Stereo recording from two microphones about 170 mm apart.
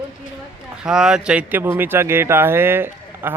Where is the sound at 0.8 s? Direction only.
5° right (ahead or behind).